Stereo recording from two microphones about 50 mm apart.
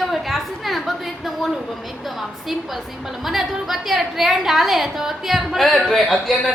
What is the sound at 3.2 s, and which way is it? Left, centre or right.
A woman's voice, centre.